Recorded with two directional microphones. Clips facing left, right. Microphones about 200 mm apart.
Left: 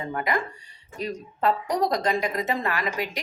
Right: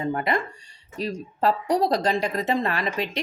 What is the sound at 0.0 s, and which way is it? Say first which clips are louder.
Speech: right 2 dB; 25° right (ahead or behind).